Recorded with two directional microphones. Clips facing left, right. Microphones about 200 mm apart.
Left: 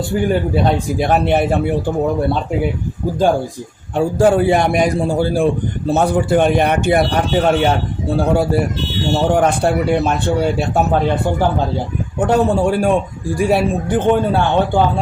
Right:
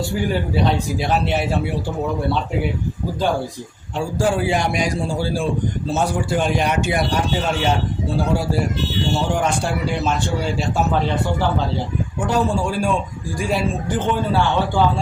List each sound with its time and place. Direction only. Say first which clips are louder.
0.3 s a man's voice: left 4 dB; 50° left (ahead or behind)
3.9 s a man's voice: left 7 dB; 55° left (ahead or behind)
9.3 s a man's voice: left 6 dB; 60° left (ahead or behind)